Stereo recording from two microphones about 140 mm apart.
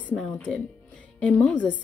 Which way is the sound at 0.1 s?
5° left (ahead or behind).